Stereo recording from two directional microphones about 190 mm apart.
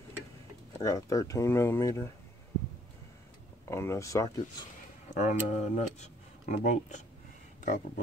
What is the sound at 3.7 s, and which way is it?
Speech, 15° left (ahead or behind).